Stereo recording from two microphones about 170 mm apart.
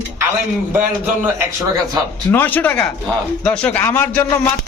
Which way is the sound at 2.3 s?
10° left (ahead or behind).